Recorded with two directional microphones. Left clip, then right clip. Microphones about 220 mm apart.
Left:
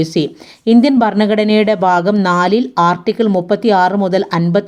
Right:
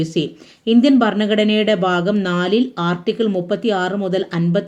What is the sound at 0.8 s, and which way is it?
Speech, 30° left (ahead or behind).